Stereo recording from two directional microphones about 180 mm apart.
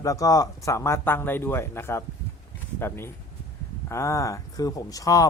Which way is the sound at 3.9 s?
15° left (ahead or behind).